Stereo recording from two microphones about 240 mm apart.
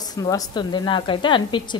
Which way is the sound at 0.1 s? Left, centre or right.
Centre.